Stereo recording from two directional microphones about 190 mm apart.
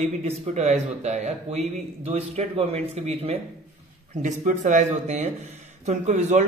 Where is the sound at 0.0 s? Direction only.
35° right (ahead or behind).